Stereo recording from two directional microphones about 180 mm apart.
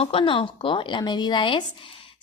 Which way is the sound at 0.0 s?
30° left (ahead or behind).